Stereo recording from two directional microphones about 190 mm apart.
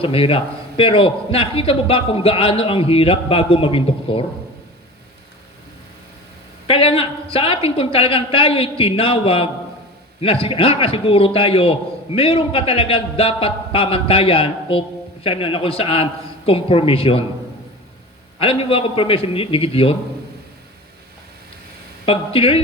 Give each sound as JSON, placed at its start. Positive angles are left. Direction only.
{"t": 0.0, "sound": "a man's voice", "side_deg": 30}
{"t": 6.7, "sound": "a man's voice", "side_deg": 30}
{"t": 18.3, "sound": "a man's voice", "side_deg": 30}
{"t": 22.0, "sound": "a man's voice", "side_deg": 30}